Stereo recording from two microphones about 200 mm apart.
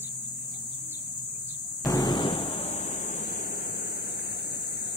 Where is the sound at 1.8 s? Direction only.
20° left (ahead or behind); by 3.4 s 40° left (ahead or behind).